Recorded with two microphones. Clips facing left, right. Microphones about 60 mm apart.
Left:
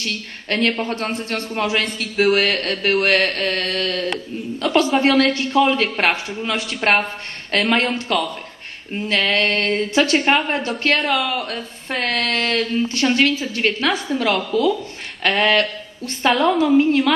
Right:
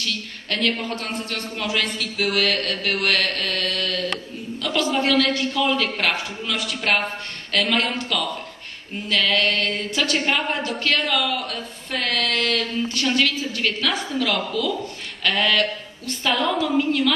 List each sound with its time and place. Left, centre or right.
0.0 s a woman's voice: left